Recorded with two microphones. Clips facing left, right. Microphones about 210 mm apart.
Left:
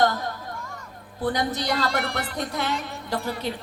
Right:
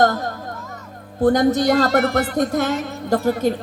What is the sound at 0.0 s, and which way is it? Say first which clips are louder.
Children playing: right 5 dB; 45° right (ahead or behind).